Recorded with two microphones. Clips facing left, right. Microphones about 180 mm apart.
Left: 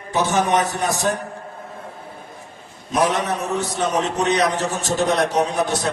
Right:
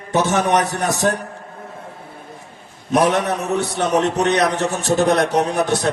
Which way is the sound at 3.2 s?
65° right (ahead or behind).